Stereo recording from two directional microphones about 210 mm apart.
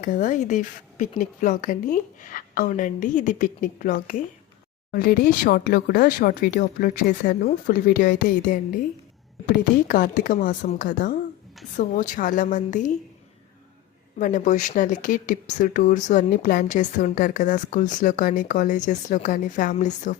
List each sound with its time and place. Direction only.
0.0 s speech: 40° left (ahead or behind)
9.8 s speech: 40° left (ahead or behind)
14.2 s speech: 40° left (ahead or behind)